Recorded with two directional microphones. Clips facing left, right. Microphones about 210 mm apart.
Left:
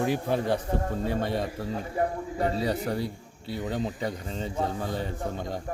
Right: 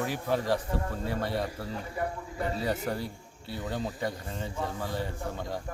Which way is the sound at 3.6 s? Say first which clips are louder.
Left 2 dB; 20° left (ahead or behind).